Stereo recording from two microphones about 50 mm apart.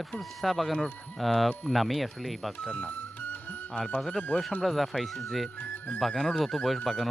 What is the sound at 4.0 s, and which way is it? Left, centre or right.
Speech, centre.